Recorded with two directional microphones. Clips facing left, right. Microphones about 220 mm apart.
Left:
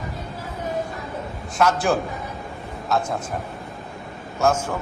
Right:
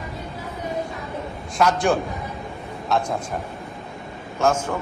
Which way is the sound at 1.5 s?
Centre (ahead or behind).